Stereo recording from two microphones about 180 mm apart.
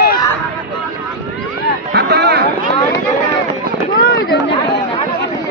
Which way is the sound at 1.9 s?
75° right (ahead or behind).